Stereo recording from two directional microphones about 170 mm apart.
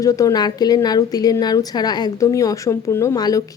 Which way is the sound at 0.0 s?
20° left (ahead or behind).